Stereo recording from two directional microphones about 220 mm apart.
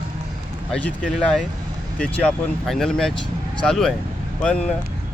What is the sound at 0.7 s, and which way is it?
Speech, 5° left (ahead or behind).